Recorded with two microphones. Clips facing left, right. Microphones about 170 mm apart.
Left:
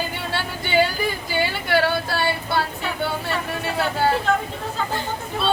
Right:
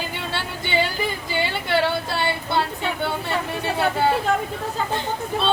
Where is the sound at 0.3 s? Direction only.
25° right (ahead or behind).